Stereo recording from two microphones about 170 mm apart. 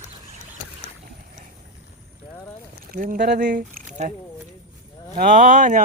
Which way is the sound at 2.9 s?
55° right (ahead or behind).